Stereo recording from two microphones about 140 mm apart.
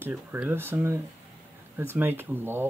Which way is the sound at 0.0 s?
15° right (ahead or behind).